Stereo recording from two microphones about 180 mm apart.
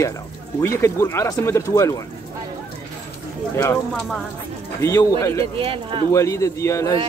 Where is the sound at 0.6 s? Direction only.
15° left (ahead or behind).